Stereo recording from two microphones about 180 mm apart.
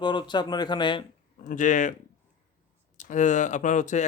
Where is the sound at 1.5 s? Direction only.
45° left (ahead or behind).